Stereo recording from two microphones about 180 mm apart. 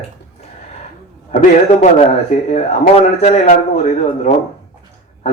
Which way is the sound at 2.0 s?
35° left (ahead or behind).